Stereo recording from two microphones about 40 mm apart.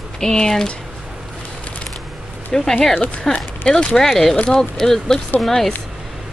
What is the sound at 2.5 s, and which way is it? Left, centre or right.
Speech, centre.